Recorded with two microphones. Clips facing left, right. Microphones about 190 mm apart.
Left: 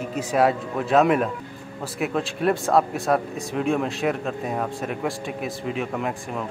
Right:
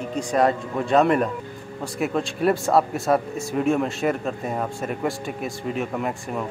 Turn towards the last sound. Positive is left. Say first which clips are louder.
# right 1 dB
turn(degrees=0)  # may be behind; listen again after turning